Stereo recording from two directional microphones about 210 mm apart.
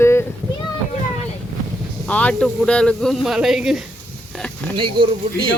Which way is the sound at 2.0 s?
5° left (ahead or behind).